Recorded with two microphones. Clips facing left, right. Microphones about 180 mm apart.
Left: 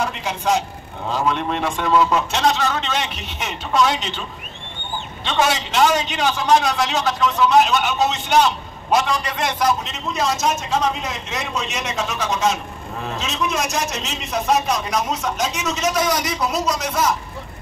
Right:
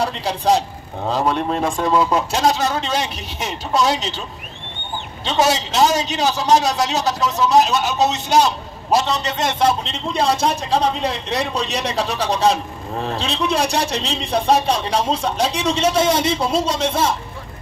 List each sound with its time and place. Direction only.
0.0 s a man's voice: 35° right (ahead or behind)
5.2 s a man's voice: 35° right (ahead or behind)